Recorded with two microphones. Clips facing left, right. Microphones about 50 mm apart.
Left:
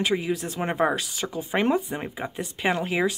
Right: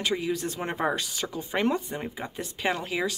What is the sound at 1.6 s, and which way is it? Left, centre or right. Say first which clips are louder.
Speech: left 2 dB; centre.